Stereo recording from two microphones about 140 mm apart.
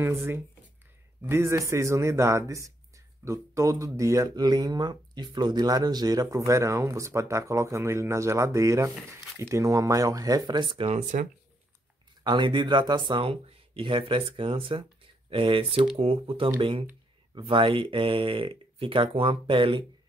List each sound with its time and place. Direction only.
0.0 s speech: 20° right (ahead or behind); by 11.2 s 55° right (ahead or behind)
12.2 s speech: 35° right (ahead or behind)